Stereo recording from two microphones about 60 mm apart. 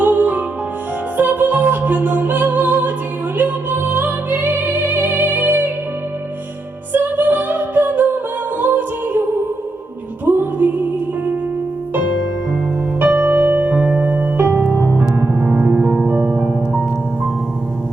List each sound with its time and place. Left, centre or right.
0.0 s music: right
6.9 s music: right
10.2 s music: right
13.0 s music: right